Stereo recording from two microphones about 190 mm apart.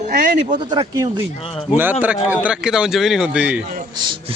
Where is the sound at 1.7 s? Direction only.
10° right (ahead or behind).